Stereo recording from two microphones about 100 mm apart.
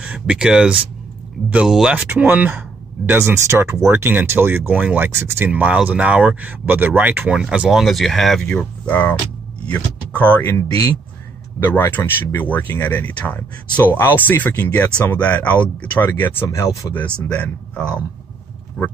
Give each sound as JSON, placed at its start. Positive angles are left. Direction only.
{"t": 0.0, "sound": "speech", "side_deg": -10}
{"t": 2.0, "sound": "speech", "side_deg": -20}
{"t": 5.5, "sound": "speech", "side_deg": -15}
{"t": 8.5, "sound": "speech", "side_deg": 15}
{"t": 11.6, "sound": "speech", "side_deg": 20}
{"t": 16.4, "sound": "speech", "side_deg": 30}
{"t": 17.3, "sound": "speech", "side_deg": 15}